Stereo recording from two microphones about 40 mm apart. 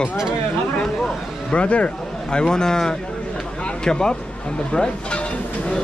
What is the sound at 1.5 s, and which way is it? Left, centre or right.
Speech, left.